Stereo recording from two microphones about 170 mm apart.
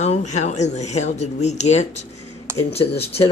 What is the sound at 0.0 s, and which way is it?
Speech, 40° left (ahead or behind).